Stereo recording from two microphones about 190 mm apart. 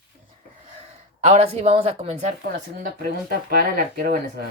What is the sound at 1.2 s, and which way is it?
A woman's voice, 35° right (ahead or behind).